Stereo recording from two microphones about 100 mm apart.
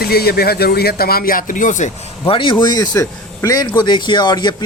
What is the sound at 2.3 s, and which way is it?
Speech, 55° left (ahead or behind).